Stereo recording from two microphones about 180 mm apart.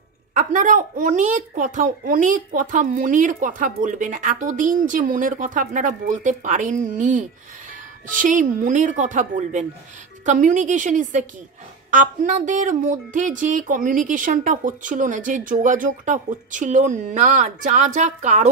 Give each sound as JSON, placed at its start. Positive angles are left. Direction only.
{"t": 0.3, "sound": "a woman's voice", "side_deg": -45}